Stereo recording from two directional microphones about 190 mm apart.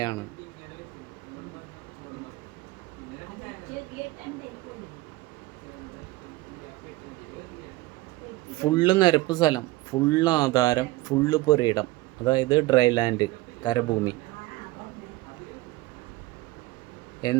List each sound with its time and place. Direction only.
8.5 s speech: 20° left (ahead or behind)
17.2 s speech: 20° left (ahead or behind)